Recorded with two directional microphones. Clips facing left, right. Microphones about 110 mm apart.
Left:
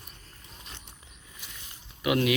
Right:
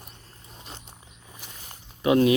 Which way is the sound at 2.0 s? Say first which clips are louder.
Right 6 dB; 30° right (ahead or behind).